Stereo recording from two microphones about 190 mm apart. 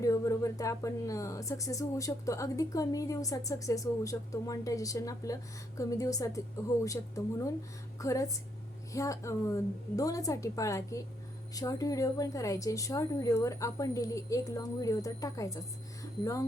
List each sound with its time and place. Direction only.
0.0 s speech: 15° left (ahead or behind)